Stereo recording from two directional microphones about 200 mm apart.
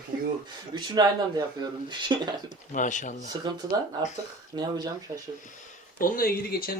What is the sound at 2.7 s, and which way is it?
Speech, 40° left (ahead or behind).